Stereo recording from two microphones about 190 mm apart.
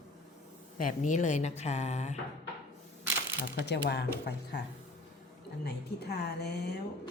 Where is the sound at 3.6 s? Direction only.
60° left (ahead or behind).